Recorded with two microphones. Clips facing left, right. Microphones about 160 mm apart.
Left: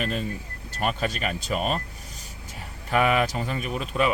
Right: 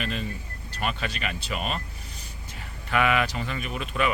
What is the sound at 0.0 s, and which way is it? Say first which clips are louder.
Speech: left 3 dB; 40° left (ahead or behind).